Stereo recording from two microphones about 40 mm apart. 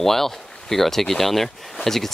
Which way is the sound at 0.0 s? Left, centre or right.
Centre.